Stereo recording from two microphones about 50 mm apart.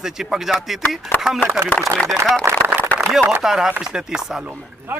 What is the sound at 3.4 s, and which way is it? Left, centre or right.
A man's voice, centre.